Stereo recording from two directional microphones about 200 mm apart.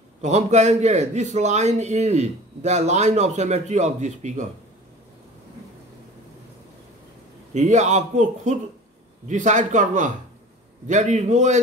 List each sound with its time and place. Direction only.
0.2 s a man's voice: 35° right (ahead or behind)
7.5 s a man's voice: 35° right (ahead or behind)